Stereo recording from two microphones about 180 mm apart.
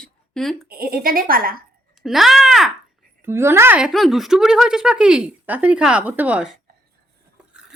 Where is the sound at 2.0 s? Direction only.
Centre (ahead or behind).